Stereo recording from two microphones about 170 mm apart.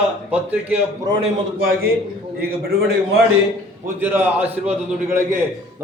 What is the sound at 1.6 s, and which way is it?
Speech, 60° right (ahead or behind).